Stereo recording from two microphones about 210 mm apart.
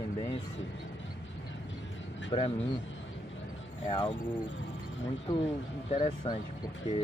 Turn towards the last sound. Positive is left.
turn(degrees=25)  # may be behind; listen again after turning